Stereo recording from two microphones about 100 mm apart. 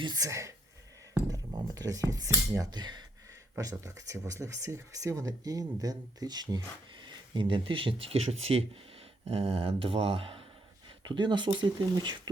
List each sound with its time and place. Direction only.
0.2 s speech: 30° right (ahead or behind)
2.7 s speech: 45° right (ahead or behind)
3.6 s speech: 35° right (ahead or behind)
7.1 s speech: 55° right (ahead or behind); by 8.8 s 85° right
9.2 s speech: 75° right (ahead or behind)
10.8 s speech: 55° right (ahead or behind)